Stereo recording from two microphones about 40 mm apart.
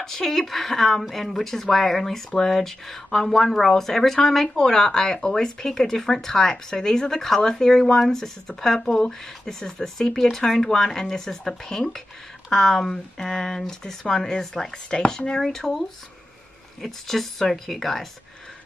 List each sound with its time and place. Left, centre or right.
0.0 s speech: centre
16.8 s speech: centre